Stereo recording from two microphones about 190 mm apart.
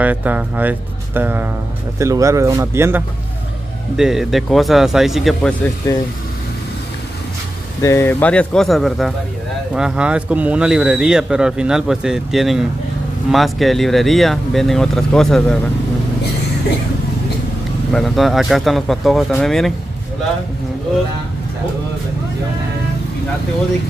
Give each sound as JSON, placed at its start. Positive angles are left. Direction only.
{"t": 0.0, "sound": "speech", "side_deg": -10}
{"t": 3.9, "sound": "speech", "side_deg": 0}
{"t": 7.8, "sound": "speech", "side_deg": 15}
{"t": 17.9, "sound": "speech", "side_deg": 0}